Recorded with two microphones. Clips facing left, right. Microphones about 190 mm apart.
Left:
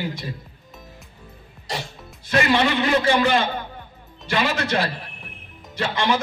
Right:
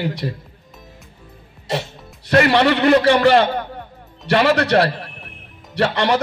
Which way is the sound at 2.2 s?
65° right (ahead or behind).